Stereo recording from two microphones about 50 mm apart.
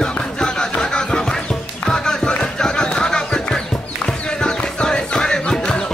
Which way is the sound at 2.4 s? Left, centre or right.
Centre.